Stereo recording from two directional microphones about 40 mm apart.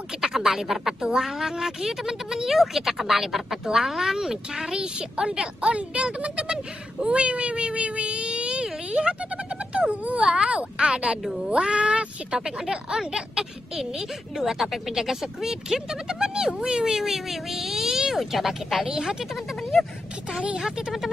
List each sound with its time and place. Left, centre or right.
0.2 s speech: centre
13.7 s speech: centre
18.9 s speech: centre
20.4 s speech: right